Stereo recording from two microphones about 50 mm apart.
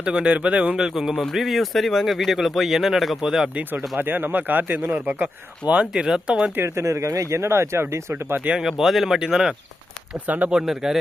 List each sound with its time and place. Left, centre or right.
0.0 s speech: centre
0.8 s speech: centre
3.2 s speech: centre
3.7 s speech: right; by 6.5 s centre
6.6 s speech: right
8.6 s speech: centre
10.2 s speech: right
10.8 s speech: centre